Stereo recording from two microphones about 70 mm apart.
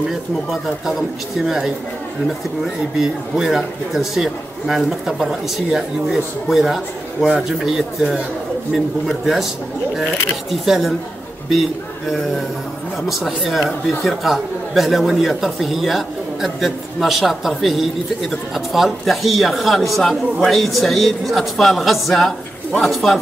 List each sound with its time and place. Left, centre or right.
0.1 s speech: centre
10.5 s speech: centre
13.1 s speech: centre